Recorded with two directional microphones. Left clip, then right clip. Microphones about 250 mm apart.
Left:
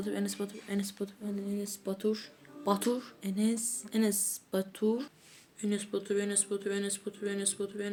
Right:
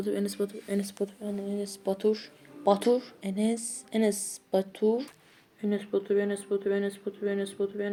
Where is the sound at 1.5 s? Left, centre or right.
Centre.